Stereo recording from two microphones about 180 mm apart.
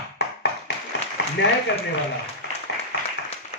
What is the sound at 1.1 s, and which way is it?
Speech, 75° left (ahead or behind).